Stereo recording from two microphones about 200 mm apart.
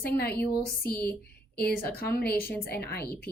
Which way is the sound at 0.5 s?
50° left (ahead or behind).